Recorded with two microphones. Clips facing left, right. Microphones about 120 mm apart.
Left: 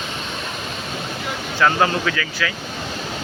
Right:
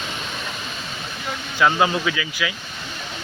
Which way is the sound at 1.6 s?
15° right (ahead or behind).